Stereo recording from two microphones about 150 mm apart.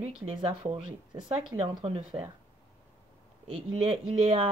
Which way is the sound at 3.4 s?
45° right (ahead or behind).